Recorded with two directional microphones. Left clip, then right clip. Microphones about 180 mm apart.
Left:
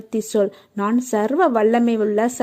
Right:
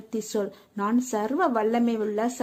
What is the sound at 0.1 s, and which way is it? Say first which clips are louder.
A woman's voice: left 9 dB; 30° left (ahead or behind).